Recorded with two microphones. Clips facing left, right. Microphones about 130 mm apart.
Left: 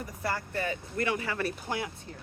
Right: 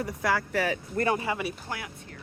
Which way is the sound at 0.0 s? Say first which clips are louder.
Right 6 dB; 90° right.